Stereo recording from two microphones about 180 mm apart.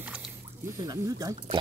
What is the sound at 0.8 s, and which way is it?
Speech, 20° right (ahead or behind).